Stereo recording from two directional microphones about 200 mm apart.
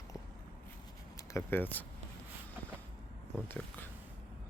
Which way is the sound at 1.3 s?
10° left (ahead or behind).